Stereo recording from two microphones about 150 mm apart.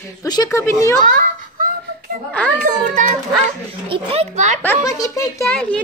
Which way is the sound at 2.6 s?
65° right (ahead or behind).